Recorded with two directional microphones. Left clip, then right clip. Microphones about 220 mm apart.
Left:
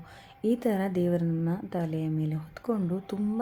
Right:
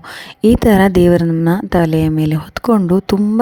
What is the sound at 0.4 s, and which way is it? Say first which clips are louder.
Speech: right 17 dB; 45° right (ahead or behind).